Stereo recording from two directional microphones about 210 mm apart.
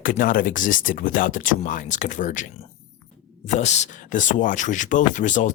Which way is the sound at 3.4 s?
35° left (ahead or behind).